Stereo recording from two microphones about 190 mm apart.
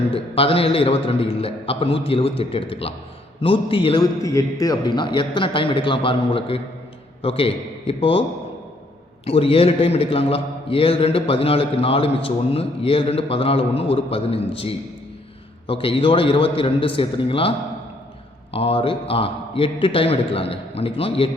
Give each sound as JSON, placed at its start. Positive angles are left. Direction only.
{"t": 0.1, "sound": "a man's voice", "side_deg": 30}
{"t": 9.2, "sound": "a man's voice", "side_deg": 30}
{"t": 18.5, "sound": "a man's voice", "side_deg": 30}